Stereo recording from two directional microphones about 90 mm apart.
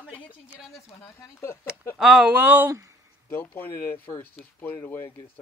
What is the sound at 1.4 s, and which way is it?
Speech, 30° left (ahead or behind).